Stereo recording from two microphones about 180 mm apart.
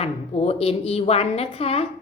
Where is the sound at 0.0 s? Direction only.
35° left (ahead or behind).